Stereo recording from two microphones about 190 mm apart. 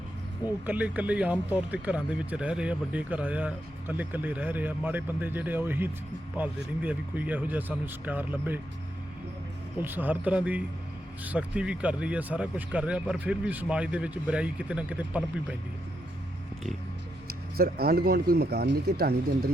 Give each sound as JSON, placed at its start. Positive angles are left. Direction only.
{"t": 0.6, "sound": "speech", "side_deg": -10}
{"t": 9.8, "sound": "speech", "side_deg": -10}
{"t": 17.2, "sound": "speech", "side_deg": -55}